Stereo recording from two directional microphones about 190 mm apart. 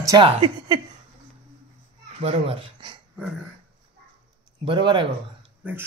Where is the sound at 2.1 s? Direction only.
30° right (ahead or behind).